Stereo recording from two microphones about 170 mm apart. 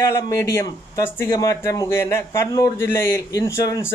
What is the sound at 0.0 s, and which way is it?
A man's voice, 15° left (ahead or behind).